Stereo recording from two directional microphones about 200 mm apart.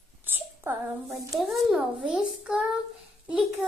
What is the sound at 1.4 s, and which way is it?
A child's voice, centre (ahead or behind).